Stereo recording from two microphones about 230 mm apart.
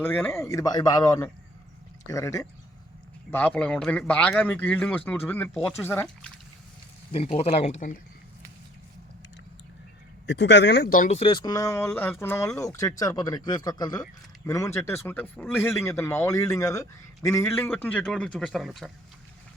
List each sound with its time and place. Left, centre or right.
0.0 s speech: centre
7.1 s speech: left
10.2 s speech: left
10.9 s a man's voice: left; by 18.9 s centre